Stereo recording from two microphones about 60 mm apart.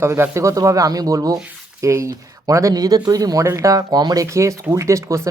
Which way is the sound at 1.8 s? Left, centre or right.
Right.